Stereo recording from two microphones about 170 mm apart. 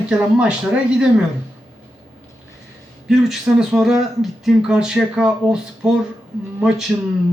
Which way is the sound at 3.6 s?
Centre (ahead or behind).